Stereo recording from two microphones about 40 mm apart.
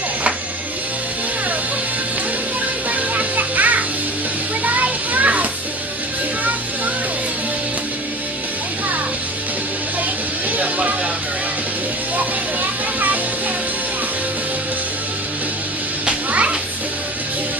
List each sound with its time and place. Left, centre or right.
2.9 s music: right
4.6 s children playing: right
10.5 s music: right
16.3 s children playing: right